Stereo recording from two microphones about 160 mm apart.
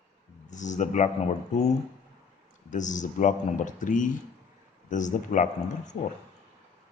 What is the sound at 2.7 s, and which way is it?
Speech, 50° left (ahead or behind).